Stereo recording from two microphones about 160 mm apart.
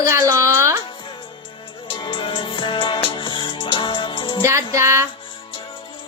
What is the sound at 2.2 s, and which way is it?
Music, 30° left (ahead or behind).